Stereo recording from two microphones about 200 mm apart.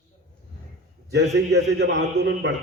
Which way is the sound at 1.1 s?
55° right (ahead or behind).